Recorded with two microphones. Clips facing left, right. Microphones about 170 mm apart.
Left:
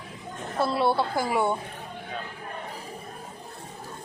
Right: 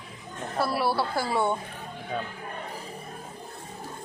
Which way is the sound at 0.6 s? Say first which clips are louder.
Left 2 dB; 20° left (ahead or behind).